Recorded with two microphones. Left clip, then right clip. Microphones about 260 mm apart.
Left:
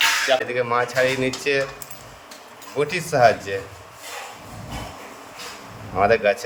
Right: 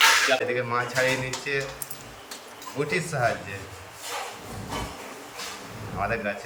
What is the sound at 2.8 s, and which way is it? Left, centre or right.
Speech, left.